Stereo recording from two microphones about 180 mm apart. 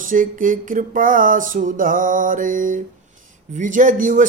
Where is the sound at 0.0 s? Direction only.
50° right (ahead or behind).